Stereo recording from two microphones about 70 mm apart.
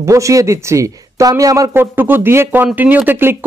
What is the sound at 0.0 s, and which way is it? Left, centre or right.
Speech, right.